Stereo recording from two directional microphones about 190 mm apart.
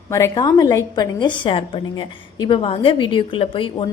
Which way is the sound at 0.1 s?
20° left (ahead or behind).